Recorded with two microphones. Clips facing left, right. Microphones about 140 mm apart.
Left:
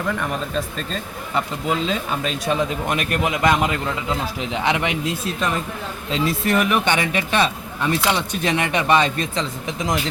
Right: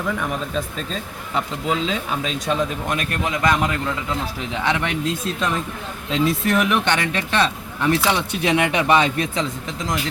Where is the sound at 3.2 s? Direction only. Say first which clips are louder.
Left 1 dB; 15° left (ahead or behind).